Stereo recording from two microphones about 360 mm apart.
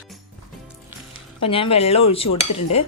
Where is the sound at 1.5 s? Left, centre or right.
Centre.